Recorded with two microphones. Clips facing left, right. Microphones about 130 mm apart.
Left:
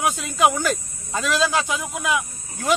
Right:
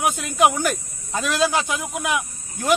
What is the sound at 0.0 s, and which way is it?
Speech, 20° right (ahead or behind).